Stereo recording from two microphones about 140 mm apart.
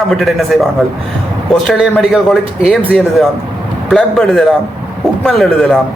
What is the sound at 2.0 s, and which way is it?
A man's voice, centre (ahead or behind).